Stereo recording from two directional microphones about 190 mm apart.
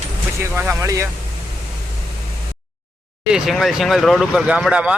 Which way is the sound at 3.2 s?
Centre (ahead or behind).